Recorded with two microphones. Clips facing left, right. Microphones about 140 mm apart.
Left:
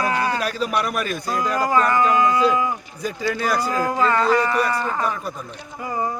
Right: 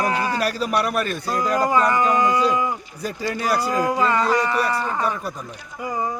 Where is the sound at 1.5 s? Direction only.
20° right (ahead or behind).